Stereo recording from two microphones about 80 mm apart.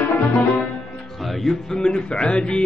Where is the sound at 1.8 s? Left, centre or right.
Centre.